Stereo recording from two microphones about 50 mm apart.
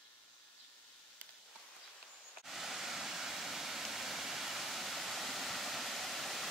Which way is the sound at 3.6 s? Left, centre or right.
Centre.